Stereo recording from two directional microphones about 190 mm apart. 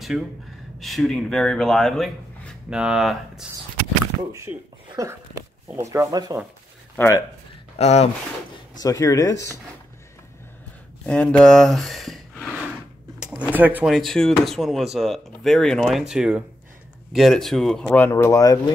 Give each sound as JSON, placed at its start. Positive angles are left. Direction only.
{"t": 0.7, "sound": "speech", "side_deg": 0}
{"t": 4.3, "sound": "speech", "side_deg": -15}
{"t": 7.0, "sound": "speech", "side_deg": 10}
{"t": 7.7, "sound": "speech", "side_deg": 35}
{"t": 8.8, "sound": "speech", "side_deg": 15}
{"t": 11.1, "sound": "speech", "side_deg": 5}
{"t": 13.9, "sound": "speech", "side_deg": 0}